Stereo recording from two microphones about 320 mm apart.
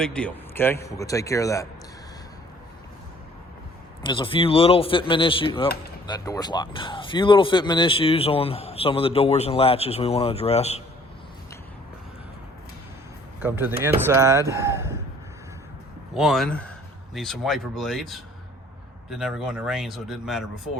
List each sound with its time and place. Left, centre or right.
0.0 s speech: centre
4.0 s speech: centre
13.4 s speech: centre
16.1 s speech: centre